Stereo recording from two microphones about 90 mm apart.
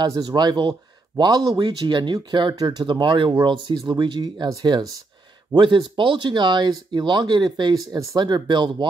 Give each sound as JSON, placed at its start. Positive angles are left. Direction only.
{"t": 0.2, "sound": "speech", "side_deg": -50}
{"t": 5.5, "sound": "speech", "side_deg": -60}